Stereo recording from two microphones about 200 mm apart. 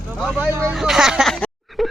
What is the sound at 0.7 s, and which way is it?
Music, centre (ahead or behind).